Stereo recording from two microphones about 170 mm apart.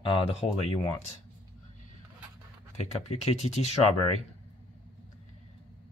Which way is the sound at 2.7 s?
40° left (ahead or behind).